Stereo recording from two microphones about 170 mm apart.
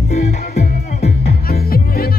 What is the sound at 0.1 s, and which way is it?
Music, 40° left (ahead or behind).